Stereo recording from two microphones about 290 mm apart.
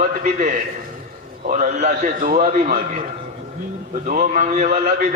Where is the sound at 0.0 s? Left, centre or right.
Right.